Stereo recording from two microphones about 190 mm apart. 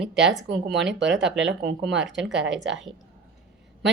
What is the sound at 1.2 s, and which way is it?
A woman's voice, 5° right (ahead or behind).